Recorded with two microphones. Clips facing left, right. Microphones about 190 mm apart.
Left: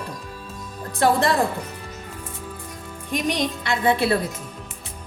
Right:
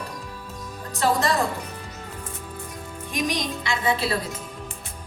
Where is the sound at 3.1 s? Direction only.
60° left (ahead or behind).